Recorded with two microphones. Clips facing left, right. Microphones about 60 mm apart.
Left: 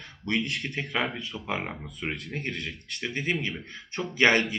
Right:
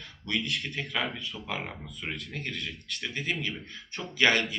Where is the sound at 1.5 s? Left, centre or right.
Left.